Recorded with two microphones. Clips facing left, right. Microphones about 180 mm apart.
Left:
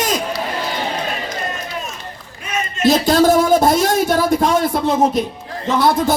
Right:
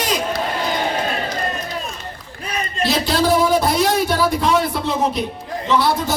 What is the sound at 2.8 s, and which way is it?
A man's voice, 45° left (ahead or behind).